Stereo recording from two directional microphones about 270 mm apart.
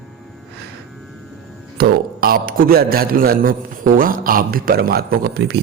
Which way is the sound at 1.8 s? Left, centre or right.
Right.